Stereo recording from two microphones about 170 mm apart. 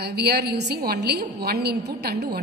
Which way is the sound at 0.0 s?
70° right (ahead or behind).